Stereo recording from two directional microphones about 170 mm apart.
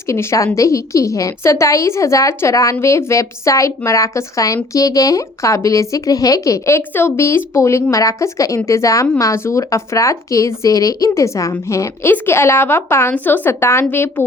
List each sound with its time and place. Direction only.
0.1 s a woman's voice: 15° left (ahead or behind)